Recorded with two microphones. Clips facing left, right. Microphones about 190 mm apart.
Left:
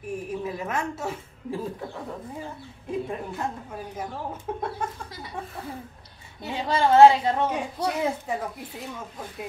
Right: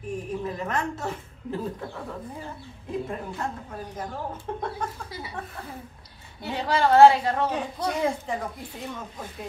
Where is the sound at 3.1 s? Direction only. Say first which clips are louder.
Left 1 dB; 10° left (ahead or behind).